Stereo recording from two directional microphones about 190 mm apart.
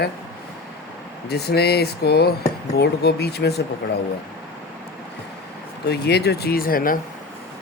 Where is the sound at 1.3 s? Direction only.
60° left (ahead or behind).